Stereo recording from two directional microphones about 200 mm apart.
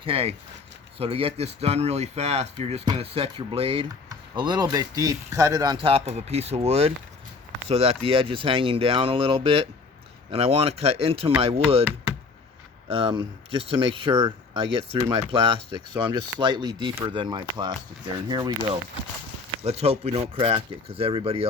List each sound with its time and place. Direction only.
0.0 s speech: 30° right (ahead or behind)
12.9 s speech: 25° right (ahead or behind)